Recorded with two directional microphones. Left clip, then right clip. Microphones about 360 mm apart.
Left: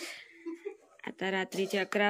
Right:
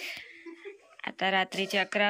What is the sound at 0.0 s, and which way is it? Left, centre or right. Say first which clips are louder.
Laughter: right 4 dB; centre.